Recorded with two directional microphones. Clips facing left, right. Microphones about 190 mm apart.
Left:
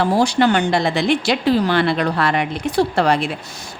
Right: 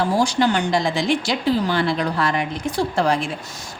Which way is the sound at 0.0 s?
60° left (ahead or behind).